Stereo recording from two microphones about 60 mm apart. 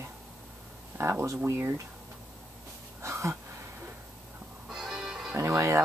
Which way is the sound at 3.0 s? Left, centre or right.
Right.